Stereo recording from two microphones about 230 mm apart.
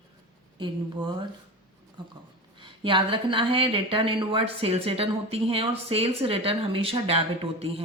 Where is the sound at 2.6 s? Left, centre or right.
Right.